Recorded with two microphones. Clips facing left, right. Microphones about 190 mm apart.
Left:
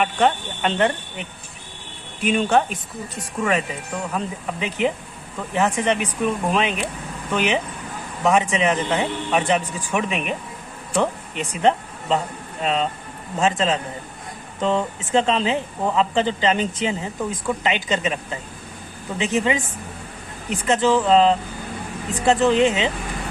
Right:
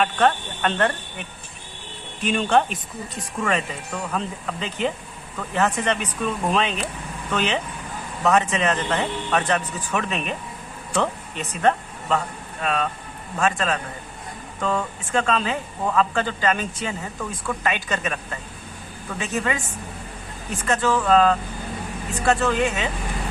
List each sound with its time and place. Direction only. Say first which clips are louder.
0.0 s speech: left 1 dB; 15° left (ahead or behind)
2.2 s speech: left 1 dB; 10° left (ahead or behind)
4.1 s speech: left 1 dB; 15° left (ahead or behind)